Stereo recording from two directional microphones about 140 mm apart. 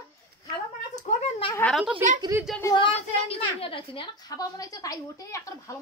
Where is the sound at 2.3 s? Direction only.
20° right (ahead or behind).